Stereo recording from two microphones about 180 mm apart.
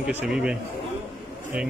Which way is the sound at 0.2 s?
5° right (ahead or behind).